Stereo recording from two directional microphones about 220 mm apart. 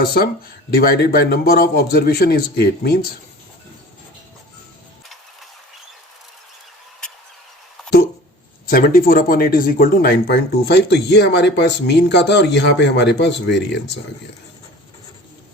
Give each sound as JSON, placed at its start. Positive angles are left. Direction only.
{"t": 0.0, "sound": "speech", "side_deg": 45}
{"t": 7.8, "sound": "a sound", "side_deg": 0}
{"t": 8.6, "sound": "speech", "side_deg": 40}